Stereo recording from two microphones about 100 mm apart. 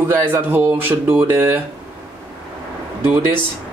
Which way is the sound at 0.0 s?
25° right (ahead or behind).